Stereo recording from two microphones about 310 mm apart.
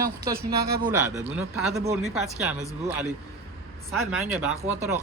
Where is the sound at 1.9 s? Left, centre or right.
Right.